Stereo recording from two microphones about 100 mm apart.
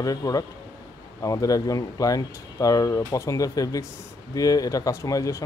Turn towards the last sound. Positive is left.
turn(degrees=35)  # may be behind; listen again after turning